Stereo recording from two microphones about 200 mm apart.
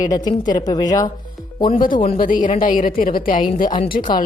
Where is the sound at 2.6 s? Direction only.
45° left (ahead or behind).